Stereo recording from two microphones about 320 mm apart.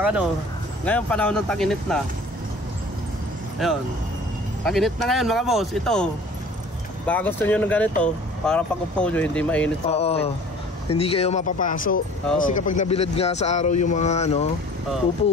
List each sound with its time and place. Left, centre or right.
0.0 s speech: centre
3.6 s speech: centre
7.1 s speech: centre
9.8 s speech: centre